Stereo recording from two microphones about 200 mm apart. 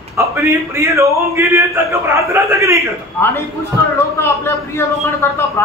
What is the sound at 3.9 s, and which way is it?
A woman's voice, 10° left (ahead or behind).